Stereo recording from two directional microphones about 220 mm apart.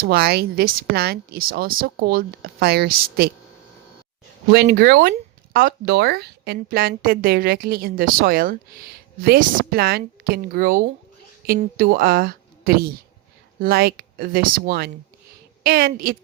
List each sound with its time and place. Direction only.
0.0 s speech: 45° right (ahead or behind)
4.5 s a woman's voice: 45° right (ahead or behind)